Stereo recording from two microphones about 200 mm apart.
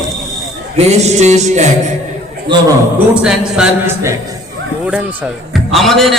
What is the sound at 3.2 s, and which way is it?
Speech, 5° right (ahead or behind).